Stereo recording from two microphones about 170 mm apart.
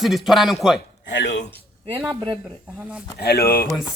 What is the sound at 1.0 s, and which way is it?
Speech, 90° left.